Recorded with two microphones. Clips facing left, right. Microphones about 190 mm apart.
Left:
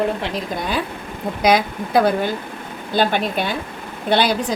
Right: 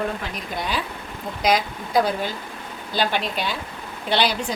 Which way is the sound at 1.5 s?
60° left (ahead or behind).